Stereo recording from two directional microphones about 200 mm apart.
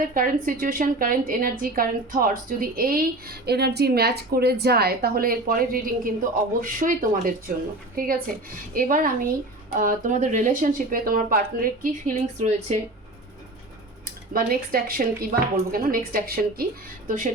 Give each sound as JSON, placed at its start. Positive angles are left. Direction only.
{"t": 0.0, "sound": "a woman's voice", "side_deg": -45}
{"t": 14.3, "sound": "a woman's voice", "side_deg": -45}